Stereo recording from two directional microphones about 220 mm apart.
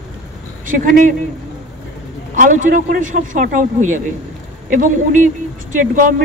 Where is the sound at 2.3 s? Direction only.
35° right (ahead or behind).